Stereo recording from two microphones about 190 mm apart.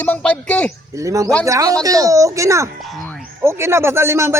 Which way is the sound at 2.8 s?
Centre (ahead or behind).